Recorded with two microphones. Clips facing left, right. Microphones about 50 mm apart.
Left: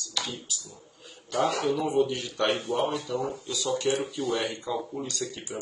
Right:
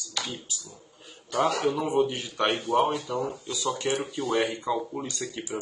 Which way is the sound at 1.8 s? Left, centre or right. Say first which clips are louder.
Even; right.